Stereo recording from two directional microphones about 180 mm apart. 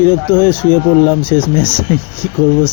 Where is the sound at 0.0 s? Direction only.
10° left (ahead or behind).